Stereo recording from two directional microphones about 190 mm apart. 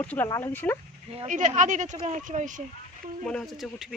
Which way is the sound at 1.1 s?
35° right (ahead or behind).